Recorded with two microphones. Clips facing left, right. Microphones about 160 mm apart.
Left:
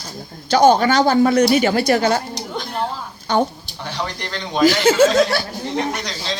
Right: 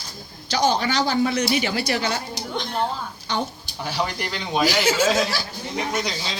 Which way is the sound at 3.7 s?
5° right (ahead or behind).